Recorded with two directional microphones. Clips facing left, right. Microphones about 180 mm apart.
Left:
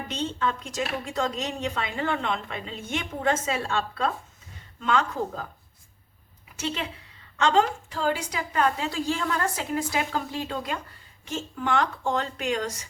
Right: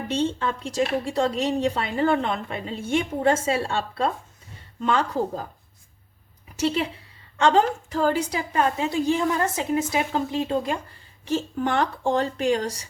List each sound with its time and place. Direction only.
0.2 s a woman's voice: 30° right (ahead or behind)
6.6 s a woman's voice: 35° right (ahead or behind)
8.5 s a woman's voice: 25° right (ahead or behind)